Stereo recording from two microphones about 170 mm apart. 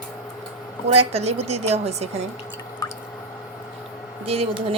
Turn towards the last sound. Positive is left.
turn(degrees=-35)  # may be behind; listen again after turning